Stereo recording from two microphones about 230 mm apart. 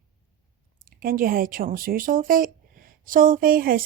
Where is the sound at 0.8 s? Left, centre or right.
Right.